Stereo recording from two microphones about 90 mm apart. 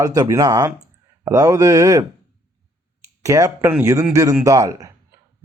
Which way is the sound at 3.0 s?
35° right (ahead or behind).